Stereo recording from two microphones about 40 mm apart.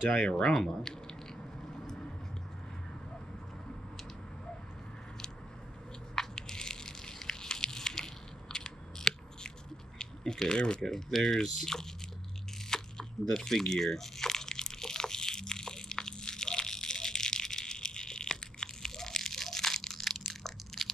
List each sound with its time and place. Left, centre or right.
0.1 s speech: left
0.6 s speech: centre
1.9 s vehicle: centre
6.1 s a sound: centre
9.9 s speech: centre
10.9 s speech: centre
12.6 s crunch: centre
13.4 s a sound: centre